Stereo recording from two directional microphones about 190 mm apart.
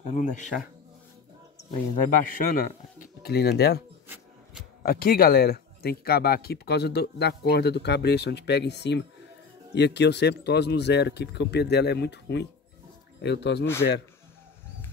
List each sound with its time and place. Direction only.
0.0 s speech: 40° left (ahead or behind)
2.0 s speech: 45° left (ahead or behind)
4.8 s speech: 50° left (ahead or behind)